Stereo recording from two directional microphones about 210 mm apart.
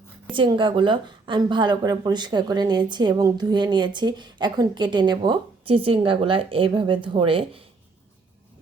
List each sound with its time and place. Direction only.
0.3 s a woman's voice: 25° right (ahead or behind)